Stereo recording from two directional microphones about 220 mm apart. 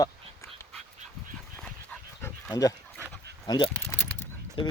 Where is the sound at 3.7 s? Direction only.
5° left (ahead or behind).